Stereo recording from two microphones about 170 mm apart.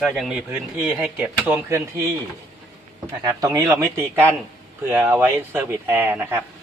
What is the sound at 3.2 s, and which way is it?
Speech, 20° right (ahead or behind).